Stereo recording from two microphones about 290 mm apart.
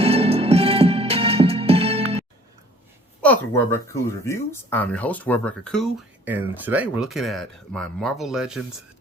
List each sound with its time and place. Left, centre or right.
0.0 s music: centre
3.2 s speech: centre
6.2 s speech: centre